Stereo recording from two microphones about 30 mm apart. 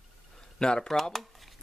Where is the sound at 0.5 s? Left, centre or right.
Left.